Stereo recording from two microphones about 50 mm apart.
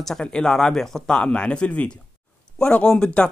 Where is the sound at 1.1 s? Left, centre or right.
Centre.